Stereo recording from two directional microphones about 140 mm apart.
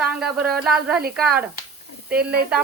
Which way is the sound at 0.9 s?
90° right.